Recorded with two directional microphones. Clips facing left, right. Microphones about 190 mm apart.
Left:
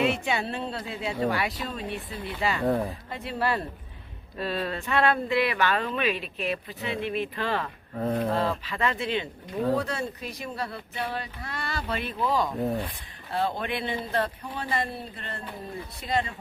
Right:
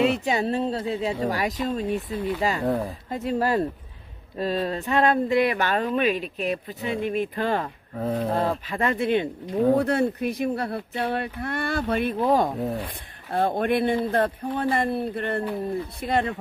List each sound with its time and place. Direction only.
0.0 s speech: 35° right (ahead or behind)
2.6 s speech: centre (ahead or behind)
3.1 s speech: 40° right (ahead or behind)
7.9 s speech: centre (ahead or behind)
8.4 s speech: 45° right (ahead or behind)
12.5 s speech: centre (ahead or behind)
13.3 s speech: 50° right (ahead or behind)